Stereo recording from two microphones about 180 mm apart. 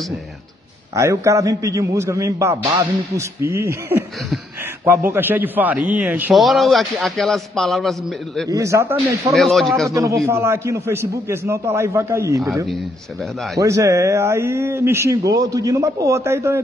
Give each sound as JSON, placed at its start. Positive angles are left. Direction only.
{"t": 0.9, "sound": "a man's voice", "side_deg": -15}
{"t": 8.5, "sound": "a man's voice", "side_deg": -15}
{"t": 9.3, "sound": "a man's voice", "side_deg": 0}
{"t": 9.8, "sound": "a man's voice", "side_deg": -15}
{"t": 13.6, "sound": "a man's voice", "side_deg": -15}